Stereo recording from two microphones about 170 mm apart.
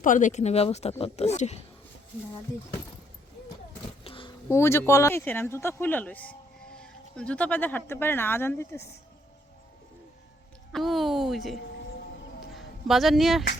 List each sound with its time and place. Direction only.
0.0 s a woman's voice: 50° left (ahead or behind)
4.0 s a sound: 30° left (ahead or behind)
4.4 s speech: 15° left (ahead or behind)
10.7 s a woman's voice: centre (ahead or behind)